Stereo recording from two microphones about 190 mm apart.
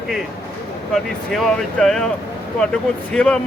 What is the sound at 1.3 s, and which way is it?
Speech, centre (ahead or behind).